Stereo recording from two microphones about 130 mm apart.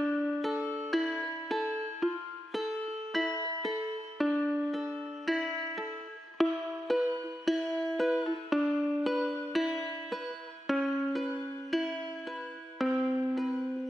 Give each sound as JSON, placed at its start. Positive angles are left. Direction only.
{"t": 0.4, "sound": "music", "side_deg": 0}